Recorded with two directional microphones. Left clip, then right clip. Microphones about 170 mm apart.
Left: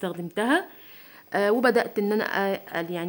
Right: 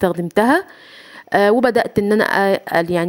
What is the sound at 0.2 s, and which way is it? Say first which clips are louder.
Speech: right 9 dB; 50° right (ahead or behind).